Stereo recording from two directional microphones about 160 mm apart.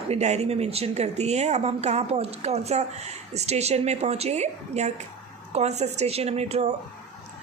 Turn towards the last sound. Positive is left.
turn(degrees=-40)  # may be behind; listen again after turning